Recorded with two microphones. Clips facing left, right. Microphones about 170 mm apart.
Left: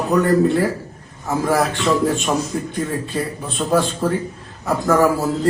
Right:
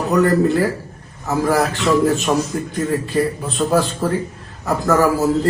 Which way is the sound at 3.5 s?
Centre (ahead or behind).